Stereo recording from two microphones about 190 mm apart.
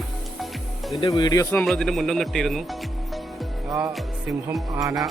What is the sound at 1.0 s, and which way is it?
Speech, 20° left (ahead or behind).